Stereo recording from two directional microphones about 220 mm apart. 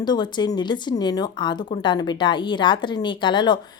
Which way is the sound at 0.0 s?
20° left (ahead or behind).